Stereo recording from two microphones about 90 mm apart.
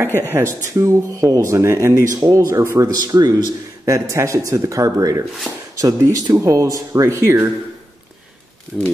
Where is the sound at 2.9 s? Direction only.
45° right (ahead or behind).